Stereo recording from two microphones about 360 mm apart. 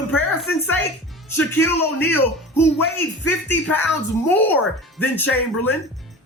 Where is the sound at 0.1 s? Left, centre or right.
Centre.